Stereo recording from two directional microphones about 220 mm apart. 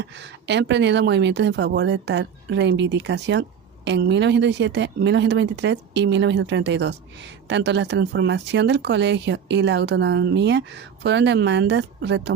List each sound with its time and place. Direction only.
0.0 s speech: 50° right (ahead or behind)